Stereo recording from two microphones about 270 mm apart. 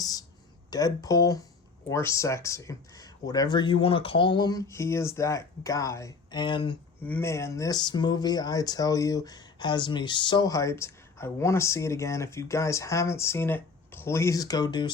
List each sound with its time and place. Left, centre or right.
0.0 s a sound: centre
0.7 s speech: centre
7.0 s speech: centre